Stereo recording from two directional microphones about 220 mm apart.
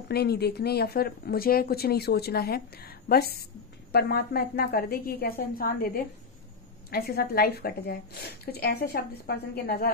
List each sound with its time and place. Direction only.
0.1 s speech: 45° left (ahead or behind)